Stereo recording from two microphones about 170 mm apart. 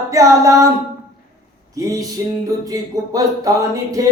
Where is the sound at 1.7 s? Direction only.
20° right (ahead or behind).